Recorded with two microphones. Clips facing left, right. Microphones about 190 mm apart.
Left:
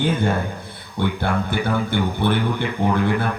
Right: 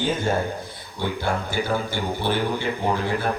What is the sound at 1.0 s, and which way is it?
Speech, 60° left (ahead or behind).